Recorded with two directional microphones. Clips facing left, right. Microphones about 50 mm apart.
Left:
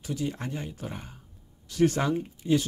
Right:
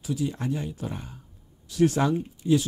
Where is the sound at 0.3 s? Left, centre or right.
Centre.